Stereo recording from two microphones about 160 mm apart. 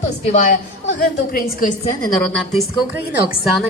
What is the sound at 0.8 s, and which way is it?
Speech, 65° left (ahead or behind).